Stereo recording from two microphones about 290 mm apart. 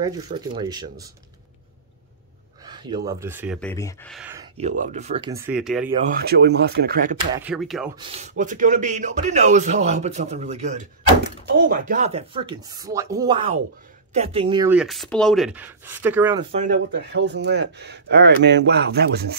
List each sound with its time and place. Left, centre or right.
0.0 s speech: centre
2.6 s a sound: centre
3.1 s speech: centre
3.5 s speech: centre
4.1 s speech: centre
4.6 s speech: right; by 5.9 s centre
5.9 s speech: right
7.3 s speech: centre
7.9 s speech: centre
16.5 s speech: right